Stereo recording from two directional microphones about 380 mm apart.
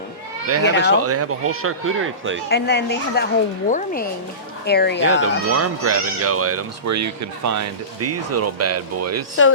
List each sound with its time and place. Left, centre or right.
0.4 s speech: right
2.5 s a woman's voice: left
5.2 s speech: right